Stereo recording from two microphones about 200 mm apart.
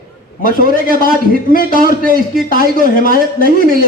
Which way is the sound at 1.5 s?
45° left (ahead or behind).